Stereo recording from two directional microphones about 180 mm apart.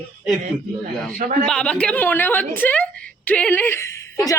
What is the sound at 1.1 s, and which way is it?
Speech, 50° right (ahead or behind).